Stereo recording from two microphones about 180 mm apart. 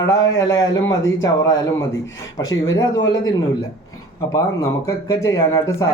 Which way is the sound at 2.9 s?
90° left.